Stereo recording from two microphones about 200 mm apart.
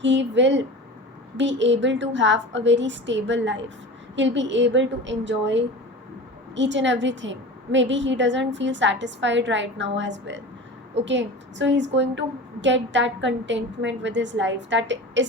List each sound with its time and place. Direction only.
0.0 s a woman's voice: 65° right (ahead or behind)